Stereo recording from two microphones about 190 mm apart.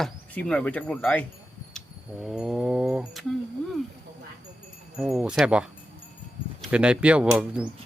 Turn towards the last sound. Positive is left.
turn(degrees=-5)  # may be behind; listen again after turning